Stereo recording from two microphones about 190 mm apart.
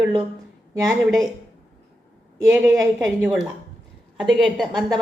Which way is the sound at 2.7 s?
15° right (ahead or behind).